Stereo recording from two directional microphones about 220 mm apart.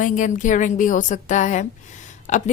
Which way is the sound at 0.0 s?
35° left (ahead or behind).